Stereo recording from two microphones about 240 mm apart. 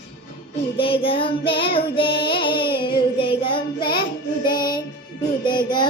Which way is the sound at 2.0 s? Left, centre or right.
Left.